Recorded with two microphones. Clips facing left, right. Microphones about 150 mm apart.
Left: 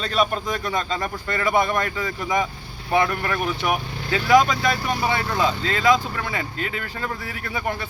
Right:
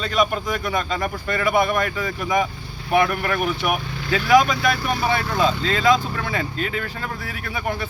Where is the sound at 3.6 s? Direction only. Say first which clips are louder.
Even; 20° left (ahead or behind).